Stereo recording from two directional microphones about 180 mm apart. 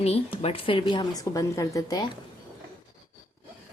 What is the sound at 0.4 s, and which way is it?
A woman's voice, 30° left (ahead or behind).